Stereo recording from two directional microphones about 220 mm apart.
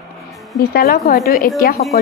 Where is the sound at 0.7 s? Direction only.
45° left (ahead or behind).